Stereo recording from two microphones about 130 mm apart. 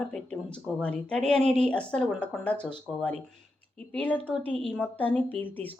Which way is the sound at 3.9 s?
15° left (ahead or behind).